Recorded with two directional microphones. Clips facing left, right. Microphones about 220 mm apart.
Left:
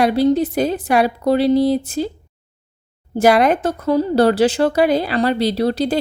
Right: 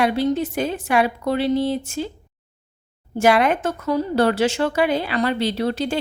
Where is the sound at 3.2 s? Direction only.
40° left (ahead or behind).